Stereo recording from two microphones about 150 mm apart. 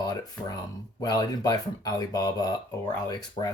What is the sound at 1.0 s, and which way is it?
Speech, 25° left (ahead or behind).